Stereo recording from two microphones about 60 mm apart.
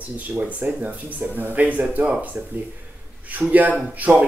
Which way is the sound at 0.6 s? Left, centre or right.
Right.